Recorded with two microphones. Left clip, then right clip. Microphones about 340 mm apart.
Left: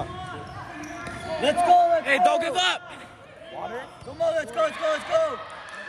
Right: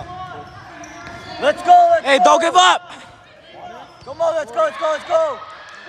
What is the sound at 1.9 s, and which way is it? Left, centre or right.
Speech, centre.